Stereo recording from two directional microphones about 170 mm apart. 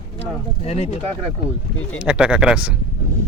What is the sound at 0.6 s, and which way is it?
Speech, 40° left (ahead or behind).